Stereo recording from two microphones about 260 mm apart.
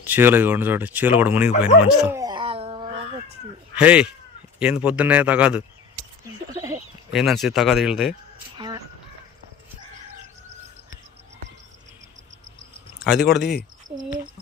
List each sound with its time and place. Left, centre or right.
0.0 s speech: centre
1.8 s dog: centre; by 3.2 s right
3.8 s a man's voice: centre
6.5 s a sound: centre
7.1 s a man's voice: centre
8.5 s chicken: centre
13.1 s a man's voice: centre